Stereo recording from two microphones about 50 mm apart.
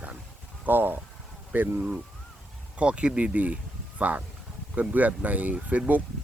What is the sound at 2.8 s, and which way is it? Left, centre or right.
Speech, right.